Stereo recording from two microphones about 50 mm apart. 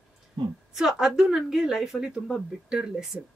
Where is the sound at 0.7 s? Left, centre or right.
Centre.